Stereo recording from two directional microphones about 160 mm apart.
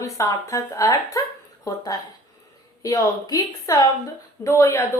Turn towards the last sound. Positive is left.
turn(degrees=15)  # may be behind; listen again after turning